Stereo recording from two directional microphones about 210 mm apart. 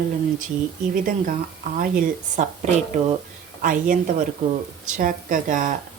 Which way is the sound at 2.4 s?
30° right (ahead or behind).